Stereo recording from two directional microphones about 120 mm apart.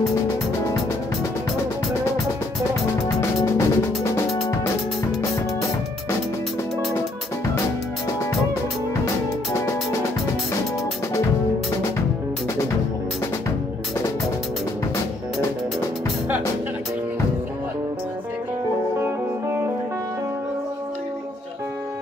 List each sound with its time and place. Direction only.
3.4 s music: 25° left (ahead or behind)
18.9 s music: 20° right (ahead or behind)